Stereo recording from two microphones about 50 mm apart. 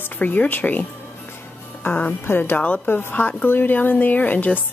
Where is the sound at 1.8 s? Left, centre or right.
Left.